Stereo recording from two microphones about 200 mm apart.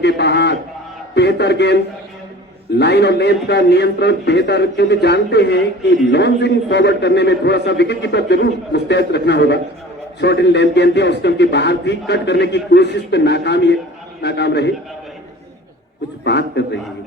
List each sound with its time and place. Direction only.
0.0 s a sound: 60° left (ahead or behind)
1.1 s a man's voice: 60° left (ahead or behind)
16.2 s a man's voice: 60° left (ahead or behind)